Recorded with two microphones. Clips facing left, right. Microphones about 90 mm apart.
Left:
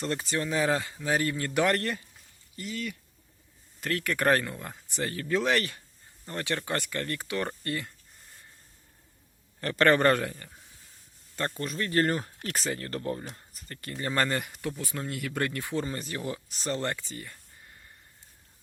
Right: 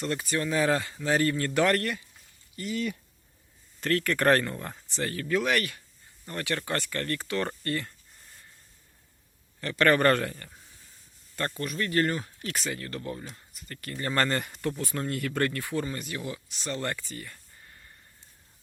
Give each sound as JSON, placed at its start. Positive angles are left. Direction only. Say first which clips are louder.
{"t": 0.0, "sound": "speech", "louder": "right 1 dB", "side_deg": 30}
{"t": 3.8, "sound": "speech", "louder": "right 3 dB", "side_deg": 10}
{"t": 4.9, "sound": "speech", "louder": "even", "side_deg": 15}
{"t": 9.6, "sound": "a man's voice", "louder": "left 1 dB", "side_deg": 40}
{"t": 9.9, "sound": "speech", "louder": "even", "side_deg": 15}
{"t": 13.8, "sound": "speech", "louder": "right 1 dB", "side_deg": 15}
{"t": 16.8, "sound": "speech", "louder": "even", "side_deg": 20}